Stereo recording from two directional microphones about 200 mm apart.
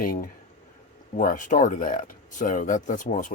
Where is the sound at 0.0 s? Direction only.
45° left (ahead or behind).